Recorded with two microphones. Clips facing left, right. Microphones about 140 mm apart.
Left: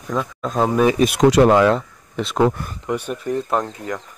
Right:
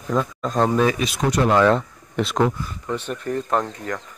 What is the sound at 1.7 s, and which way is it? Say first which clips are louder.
Speech: even; centre (ahead or behind).